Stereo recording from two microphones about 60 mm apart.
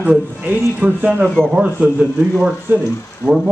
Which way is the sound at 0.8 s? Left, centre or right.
Right.